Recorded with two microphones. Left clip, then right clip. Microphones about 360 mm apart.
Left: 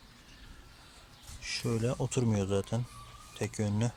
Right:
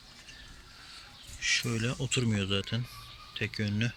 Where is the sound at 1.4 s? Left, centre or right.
Centre.